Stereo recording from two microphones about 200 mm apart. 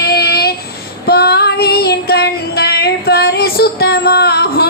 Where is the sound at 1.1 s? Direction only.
50° left (ahead or behind).